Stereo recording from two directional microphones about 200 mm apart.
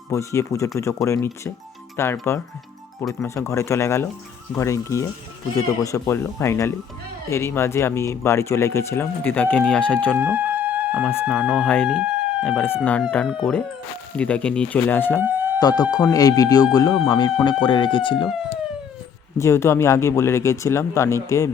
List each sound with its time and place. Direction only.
0.1 s speech: 15° left (ahead or behind)
3.0 s speech: centre (ahead or behind)
3.2 s speech: 15° left (ahead or behind)
10.2 s a sound: 10° right (ahead or behind)
11.3 s speech: 5° right (ahead or behind)
15.2 s a sound: 10° right (ahead or behind)
15.8 s speech: 20° left (ahead or behind)
19.4 s speech: 15° left (ahead or behind)